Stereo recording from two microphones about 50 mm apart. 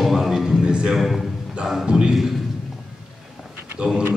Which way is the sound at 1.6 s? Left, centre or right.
Centre.